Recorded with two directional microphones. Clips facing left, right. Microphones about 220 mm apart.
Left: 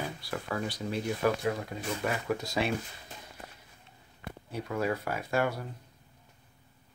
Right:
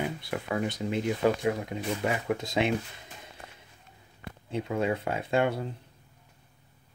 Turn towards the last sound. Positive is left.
turn(degrees=-25)  # may be behind; listen again after turning